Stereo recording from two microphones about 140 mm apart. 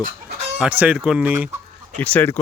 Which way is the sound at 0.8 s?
10° right (ahead or behind).